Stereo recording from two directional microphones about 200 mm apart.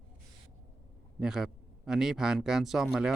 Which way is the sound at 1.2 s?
5° right (ahead or behind).